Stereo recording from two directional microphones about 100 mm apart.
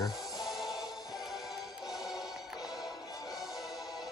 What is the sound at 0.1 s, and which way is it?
Music, centre (ahead or behind).